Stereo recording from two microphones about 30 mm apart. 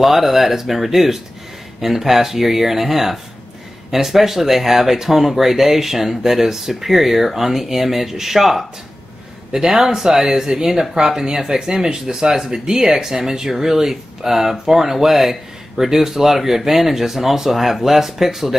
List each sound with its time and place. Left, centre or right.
0.0 s speech: centre
9.5 s speech: centre